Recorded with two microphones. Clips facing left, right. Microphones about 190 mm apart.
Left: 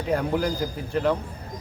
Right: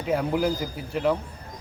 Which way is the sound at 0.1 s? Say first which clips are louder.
Right 1 dB; 5° right (ahead or behind).